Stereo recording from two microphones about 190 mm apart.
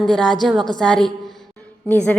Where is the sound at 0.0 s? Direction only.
Centre (ahead or behind).